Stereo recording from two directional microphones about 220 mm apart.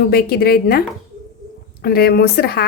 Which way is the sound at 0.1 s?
45° left (ahead or behind).